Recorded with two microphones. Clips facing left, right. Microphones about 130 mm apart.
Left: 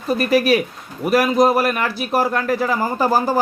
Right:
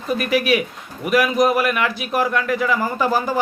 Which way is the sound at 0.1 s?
35° left (ahead or behind).